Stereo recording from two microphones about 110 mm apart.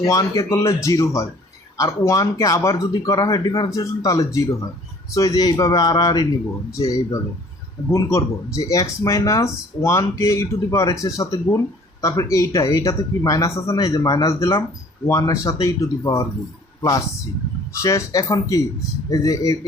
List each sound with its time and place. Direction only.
0.0 s speech: 30° left (ahead or behind)
17.8 s speech: 30° left (ahead or behind)